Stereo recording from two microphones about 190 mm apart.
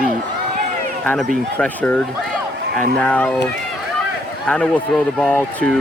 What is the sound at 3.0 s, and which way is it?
Speech, 5° left (ahead or behind).